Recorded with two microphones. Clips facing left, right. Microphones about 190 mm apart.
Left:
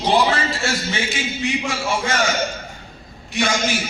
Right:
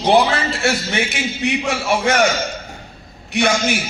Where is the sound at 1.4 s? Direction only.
65° right (ahead or behind).